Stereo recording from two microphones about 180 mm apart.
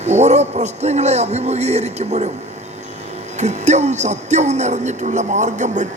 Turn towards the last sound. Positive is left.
turn(degrees=-40)  # may be behind; listen again after turning